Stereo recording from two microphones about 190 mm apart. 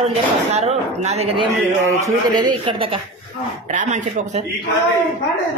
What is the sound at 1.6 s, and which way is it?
Speech, 15° right (ahead or behind).